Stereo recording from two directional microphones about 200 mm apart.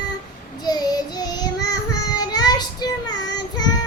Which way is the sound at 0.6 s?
20° left (ahead or behind).